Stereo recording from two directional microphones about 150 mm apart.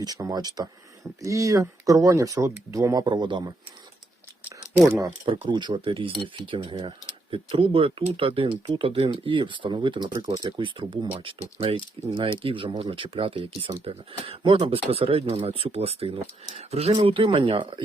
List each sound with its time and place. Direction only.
0.0 s speech: 25° right (ahead or behind)
5.0 s speech: 35° right (ahead or behind)